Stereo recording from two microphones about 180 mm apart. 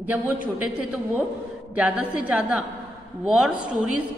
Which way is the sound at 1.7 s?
10° right (ahead or behind).